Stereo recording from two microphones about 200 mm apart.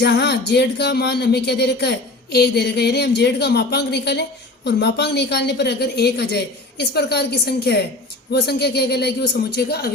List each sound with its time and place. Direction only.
0.0 s a woman's voice: 55° left (ahead or behind)